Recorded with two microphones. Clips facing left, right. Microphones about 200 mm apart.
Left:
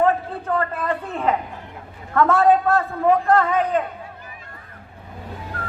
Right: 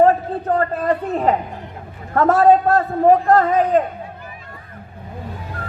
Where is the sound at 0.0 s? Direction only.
40° right (ahead or behind).